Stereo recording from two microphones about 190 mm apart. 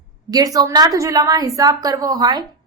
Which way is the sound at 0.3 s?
20° right (ahead or behind).